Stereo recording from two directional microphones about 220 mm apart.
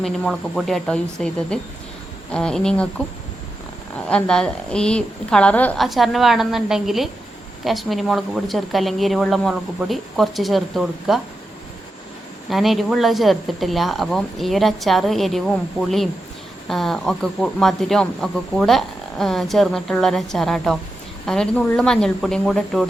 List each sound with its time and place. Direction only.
0.0 s speech: centre (ahead or behind)
4.1 s speech: 5° left (ahead or behind)
12.5 s speech: centre (ahead or behind)